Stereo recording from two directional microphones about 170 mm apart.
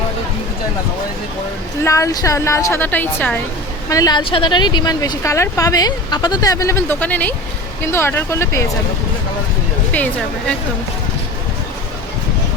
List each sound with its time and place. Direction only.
1.8 s a woman's voice: 15° left (ahead or behind)
3.8 s a woman's voice: 20° left (ahead or behind)